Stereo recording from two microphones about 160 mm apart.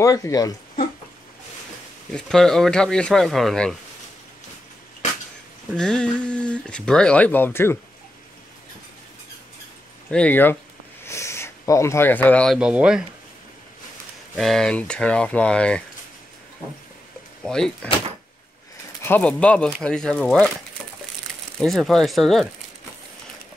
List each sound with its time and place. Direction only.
0.0 s speech: 20° left (ahead or behind)
2.1 s speech: 5° left (ahead or behind)
5.8 s speech: 5° left (ahead or behind)
10.1 s speech: 10° left (ahead or behind)
12.5 s speech: 5° right (ahead or behind)
14.3 s speech: centre (ahead or behind)
17.4 s speech: 5° left (ahead or behind)
19.0 s speech: 10° left (ahead or behind)
21.5 s speech: centre (ahead or behind)